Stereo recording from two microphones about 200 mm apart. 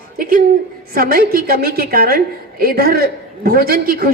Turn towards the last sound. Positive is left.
turn(degrees=-45)  # may be behind; listen again after turning